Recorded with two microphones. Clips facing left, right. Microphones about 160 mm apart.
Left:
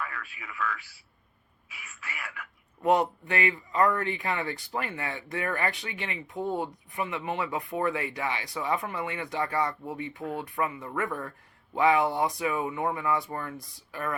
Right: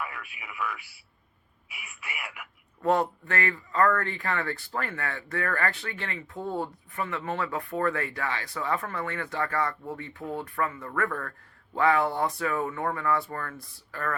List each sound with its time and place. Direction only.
0.0 s a man's voice: 15° right (ahead or behind)
2.8 s speech: 20° left (ahead or behind)